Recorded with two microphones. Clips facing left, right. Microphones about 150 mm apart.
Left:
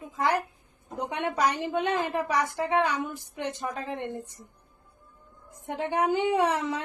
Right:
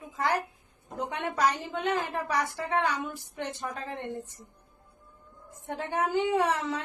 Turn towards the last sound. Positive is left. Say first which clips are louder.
# left 2 dB
turn(degrees=15)  # may be behind; listen again after turning